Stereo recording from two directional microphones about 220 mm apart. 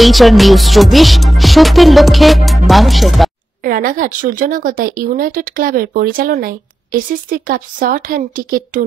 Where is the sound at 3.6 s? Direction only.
40° right (ahead or behind).